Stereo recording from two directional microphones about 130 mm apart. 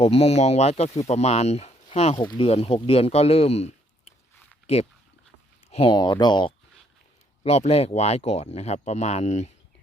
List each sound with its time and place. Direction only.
0.0 s speech: 50° left (ahead or behind)
2.2 s speech: 35° left (ahead or behind)
2.5 s speech: 50° left (ahead or behind)
5.7 s speech: 40° left (ahead or behind)
7.4 s speech: 55° left (ahead or behind)